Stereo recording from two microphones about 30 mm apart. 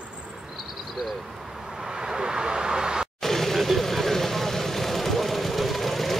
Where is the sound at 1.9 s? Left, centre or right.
Right.